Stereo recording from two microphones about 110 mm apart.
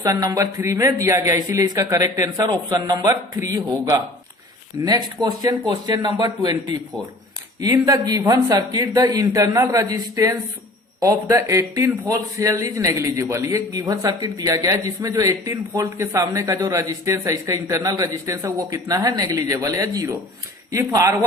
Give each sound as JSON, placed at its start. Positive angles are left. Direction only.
{"t": 0.0, "sound": "speech", "side_deg": -30}